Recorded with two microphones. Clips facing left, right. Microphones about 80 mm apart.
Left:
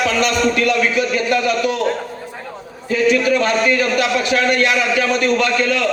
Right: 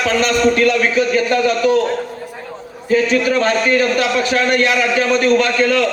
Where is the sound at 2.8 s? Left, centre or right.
Right.